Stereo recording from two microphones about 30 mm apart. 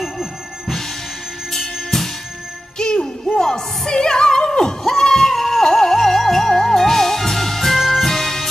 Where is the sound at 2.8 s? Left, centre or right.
Left.